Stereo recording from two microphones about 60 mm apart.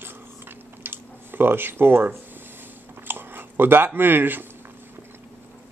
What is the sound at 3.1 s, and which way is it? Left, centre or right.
Speech, right.